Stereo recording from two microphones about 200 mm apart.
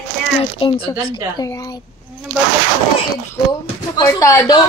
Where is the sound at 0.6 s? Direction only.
25° left (ahead or behind).